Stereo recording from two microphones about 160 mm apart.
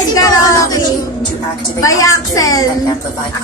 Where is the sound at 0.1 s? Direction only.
20° left (ahead or behind).